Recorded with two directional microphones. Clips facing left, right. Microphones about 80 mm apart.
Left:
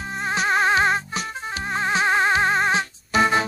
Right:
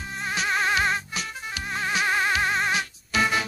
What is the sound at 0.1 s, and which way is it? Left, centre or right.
Music, left.